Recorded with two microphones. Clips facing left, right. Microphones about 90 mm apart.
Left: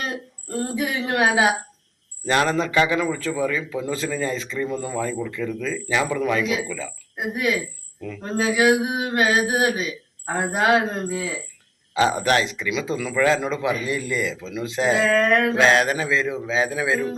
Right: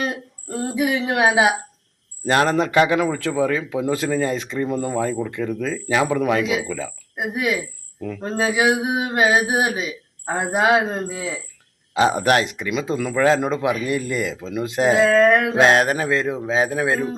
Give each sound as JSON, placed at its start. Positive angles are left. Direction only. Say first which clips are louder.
{"t": 0.0, "sound": "speech", "louder": "right 4 dB", "side_deg": -15}
{"t": 2.2, "sound": "a man's voice", "louder": "right 3 dB", "side_deg": -50}
{"t": 7.2, "sound": "speech", "louder": "right 1 dB", "side_deg": -15}
{"t": 8.2, "sound": "mantra", "louder": "even", "side_deg": -20}
{"t": 12.0, "sound": "speech", "louder": "right 3 dB", "side_deg": -50}
{"t": 15.0, "sound": "speech", "louder": "right 4 dB", "side_deg": -20}
{"t": 15.5, "sound": "speech", "louder": "right 2 dB", "side_deg": -45}